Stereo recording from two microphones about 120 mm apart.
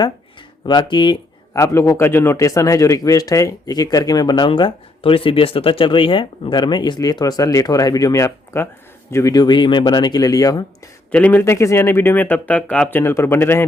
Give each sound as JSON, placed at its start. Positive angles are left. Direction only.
{"t": 0.6, "sound": "speech", "side_deg": 35}
{"t": 1.5, "sound": "speech", "side_deg": 25}
{"t": 11.1, "sound": "speech", "side_deg": 15}
{"t": 13.0, "sound": "speech", "side_deg": 20}